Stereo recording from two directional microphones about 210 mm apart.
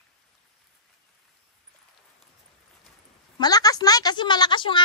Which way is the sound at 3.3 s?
20° left (ahead or behind).